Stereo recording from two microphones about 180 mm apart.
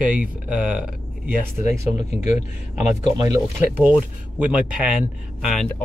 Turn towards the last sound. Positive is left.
turn(degrees=-5)  # may be behind; listen again after turning